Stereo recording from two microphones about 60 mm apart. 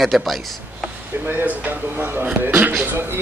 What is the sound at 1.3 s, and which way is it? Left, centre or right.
Speech, right.